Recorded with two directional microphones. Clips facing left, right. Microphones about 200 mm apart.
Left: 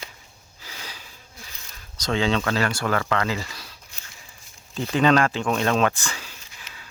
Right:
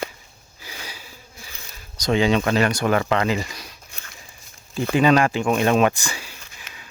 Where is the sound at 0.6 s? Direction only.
10° right (ahead or behind).